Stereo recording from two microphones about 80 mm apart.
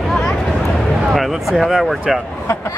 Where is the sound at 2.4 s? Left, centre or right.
Left.